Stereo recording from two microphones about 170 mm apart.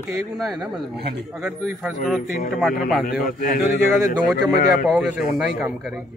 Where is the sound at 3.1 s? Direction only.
50° left (ahead or behind).